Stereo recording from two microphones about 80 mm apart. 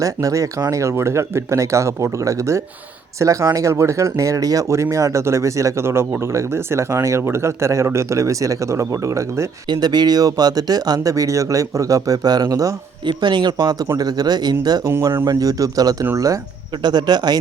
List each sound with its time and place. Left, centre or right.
0.0 s speech: right
9.6 s speech: right
13.1 s speech: right
16.8 s speech: right